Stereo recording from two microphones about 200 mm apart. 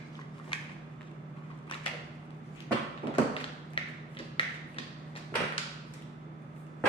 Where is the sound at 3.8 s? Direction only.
25° left (ahead or behind).